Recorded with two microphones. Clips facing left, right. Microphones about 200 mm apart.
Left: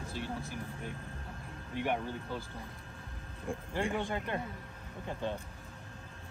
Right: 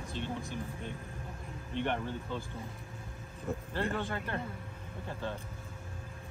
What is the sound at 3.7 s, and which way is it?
Speech, 15° left (ahead or behind).